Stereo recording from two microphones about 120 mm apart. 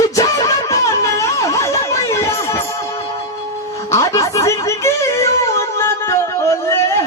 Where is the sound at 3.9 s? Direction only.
25° left (ahead or behind).